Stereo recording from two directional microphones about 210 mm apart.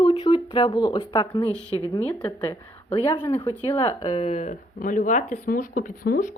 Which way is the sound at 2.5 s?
20° left (ahead or behind).